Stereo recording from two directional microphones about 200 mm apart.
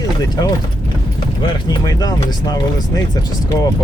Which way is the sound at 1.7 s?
20° left (ahead or behind).